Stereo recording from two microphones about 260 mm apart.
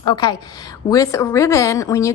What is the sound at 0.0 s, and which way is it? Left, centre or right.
A woman's voice, centre.